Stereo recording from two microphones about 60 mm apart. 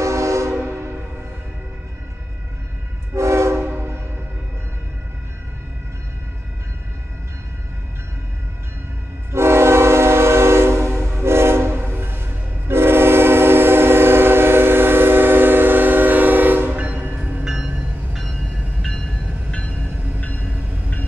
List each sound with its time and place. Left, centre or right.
0.0 s train: right
3.2 s train: right
3.5 s train: right
9.3 s train: right
18.1 s train: centre; by 21.0 s left